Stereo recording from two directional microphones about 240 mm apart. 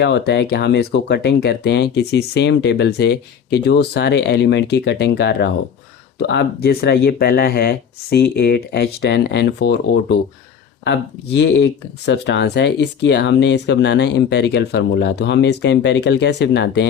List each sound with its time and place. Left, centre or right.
0.0 s speech: left
11.3 s speech: left